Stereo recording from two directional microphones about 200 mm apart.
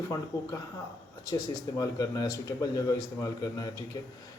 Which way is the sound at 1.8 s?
15° left (ahead or behind).